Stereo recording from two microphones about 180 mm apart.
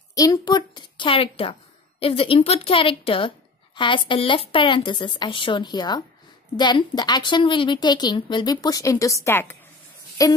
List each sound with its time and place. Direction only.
0.1 s a woman's voice: 20° left (ahead or behind)